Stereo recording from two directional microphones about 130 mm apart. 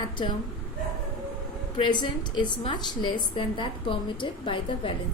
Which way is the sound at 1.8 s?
35° left (ahead or behind).